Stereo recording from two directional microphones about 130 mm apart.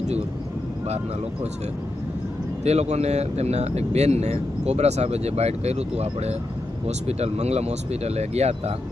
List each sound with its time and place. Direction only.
2.6 s speech: 55° right (ahead or behind)